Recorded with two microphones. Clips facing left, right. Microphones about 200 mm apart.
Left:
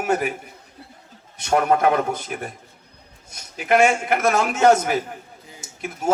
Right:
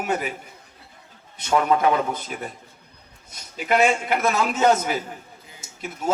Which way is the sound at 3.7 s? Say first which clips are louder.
Left 2 dB; 50° left (ahead or behind).